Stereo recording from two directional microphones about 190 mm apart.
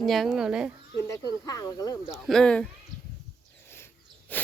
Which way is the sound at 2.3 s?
5° left (ahead or behind).